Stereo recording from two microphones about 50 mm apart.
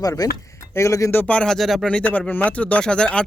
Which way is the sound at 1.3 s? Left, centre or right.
Centre.